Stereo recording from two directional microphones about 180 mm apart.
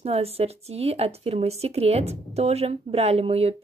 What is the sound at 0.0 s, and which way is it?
Speech, 35° right (ahead or behind).